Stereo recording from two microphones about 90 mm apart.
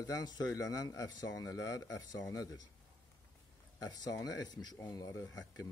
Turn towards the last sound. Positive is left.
turn(degrees=35)  # may be behind; listen again after turning